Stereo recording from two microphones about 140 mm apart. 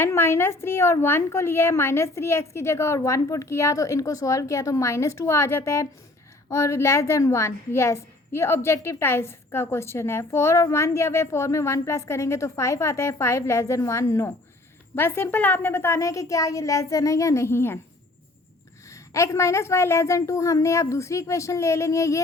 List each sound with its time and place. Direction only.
0.0 s a woman's voice: 20° left (ahead or behind)
18.9 s a woman's voice: 20° left (ahead or behind)